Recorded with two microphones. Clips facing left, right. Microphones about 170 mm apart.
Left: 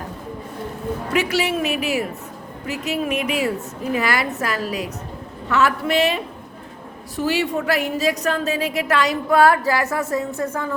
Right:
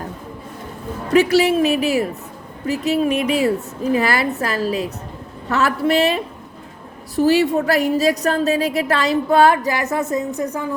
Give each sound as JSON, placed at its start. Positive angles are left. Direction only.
{"t": 1.1, "sound": "a woman's voice", "side_deg": -35}
{"t": 7.2, "sound": "a woman's voice", "side_deg": -35}